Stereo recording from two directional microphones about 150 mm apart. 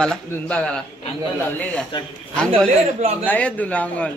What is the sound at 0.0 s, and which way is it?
A man's voice, 5° left (ahead or behind).